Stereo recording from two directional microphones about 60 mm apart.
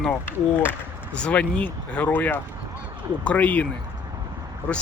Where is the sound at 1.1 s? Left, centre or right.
Centre.